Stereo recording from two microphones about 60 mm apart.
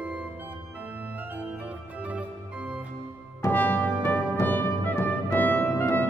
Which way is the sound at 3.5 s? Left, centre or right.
Left.